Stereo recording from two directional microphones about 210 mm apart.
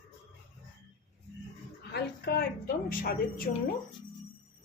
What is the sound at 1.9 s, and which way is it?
A woman's voice, 50° left (ahead or behind).